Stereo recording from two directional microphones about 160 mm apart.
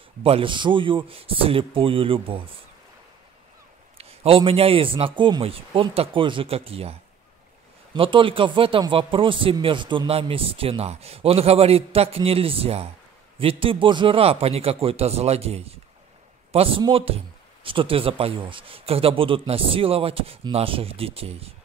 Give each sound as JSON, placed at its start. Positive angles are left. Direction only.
{"t": 0.2, "sound": "speech", "side_deg": -35}
{"t": 4.0, "sound": "speech", "side_deg": -40}